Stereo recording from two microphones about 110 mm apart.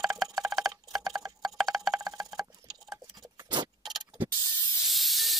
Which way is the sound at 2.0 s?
35° right (ahead or behind).